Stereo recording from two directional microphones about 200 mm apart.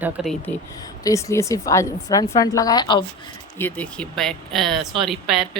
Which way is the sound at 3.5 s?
10° left (ahead or behind).